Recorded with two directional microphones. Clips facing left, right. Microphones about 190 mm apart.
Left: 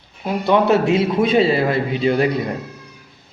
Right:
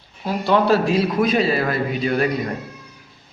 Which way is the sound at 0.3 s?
20° left (ahead or behind).